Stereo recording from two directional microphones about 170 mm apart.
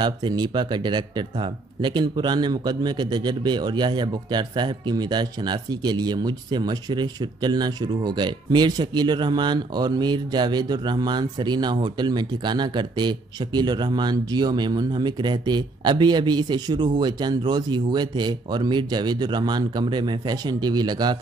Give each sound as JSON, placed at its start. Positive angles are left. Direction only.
{"t": 0.0, "sound": "speech", "side_deg": -25}